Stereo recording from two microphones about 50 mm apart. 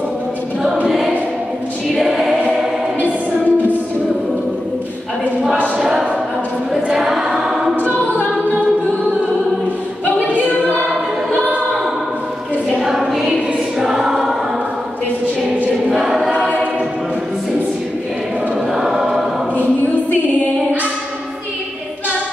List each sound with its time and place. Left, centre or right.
0.8 s choir: centre
3.0 s music: right
5.8 s a sound: centre
6.7 s choir: centre
10.0 s a capella: left
12.8 s choir: centre
15.9 s choir: centre
18.8 s choir: centre